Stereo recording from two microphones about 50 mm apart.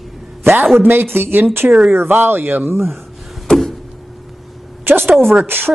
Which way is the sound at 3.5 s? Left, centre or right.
Centre.